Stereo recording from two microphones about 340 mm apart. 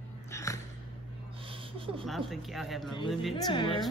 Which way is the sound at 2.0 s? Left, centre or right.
Centre.